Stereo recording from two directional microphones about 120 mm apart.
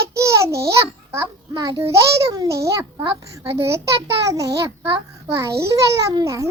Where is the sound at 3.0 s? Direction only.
40° right (ahead or behind).